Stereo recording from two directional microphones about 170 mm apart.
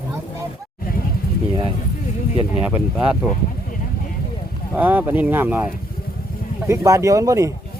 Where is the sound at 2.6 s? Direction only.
10° right (ahead or behind).